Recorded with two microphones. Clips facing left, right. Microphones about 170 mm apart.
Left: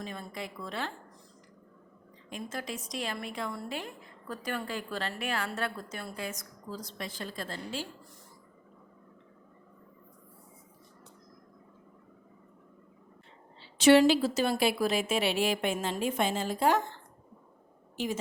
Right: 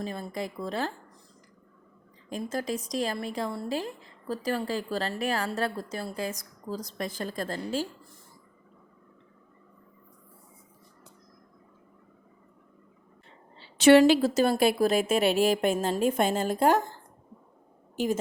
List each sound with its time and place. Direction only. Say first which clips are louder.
0.0 s a woman's voice: right 6 dB; 35° right (ahead or behind)
2.3 s a woman's voice: right 7 dB; 40° right (ahead or behind)
13.7 s a woman's voice: right 3 dB; 55° right (ahead or behind)